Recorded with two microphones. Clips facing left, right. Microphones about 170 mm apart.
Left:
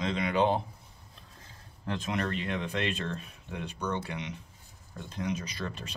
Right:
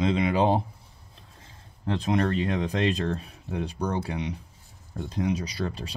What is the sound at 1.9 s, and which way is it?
Speech, 35° right (ahead or behind).